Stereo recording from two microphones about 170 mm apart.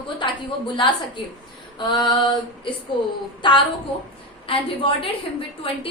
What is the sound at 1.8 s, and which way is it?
Female singing, 30° left (ahead or behind).